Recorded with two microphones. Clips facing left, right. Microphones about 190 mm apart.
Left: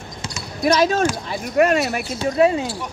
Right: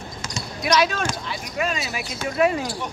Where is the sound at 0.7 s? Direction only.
45° left (ahead or behind).